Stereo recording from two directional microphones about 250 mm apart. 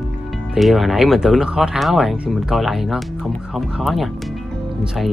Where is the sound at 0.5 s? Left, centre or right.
Centre.